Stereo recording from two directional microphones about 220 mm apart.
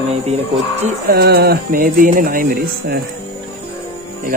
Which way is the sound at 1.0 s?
45° right (ahead or behind).